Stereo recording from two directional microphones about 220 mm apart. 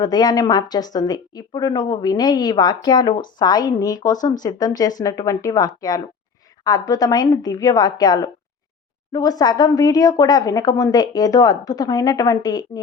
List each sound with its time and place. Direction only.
0.0 s a woman's voice: 20° left (ahead or behind)